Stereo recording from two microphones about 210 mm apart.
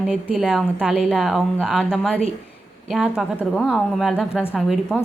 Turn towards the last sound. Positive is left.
turn(degrees=0)  # may be behind; listen again after turning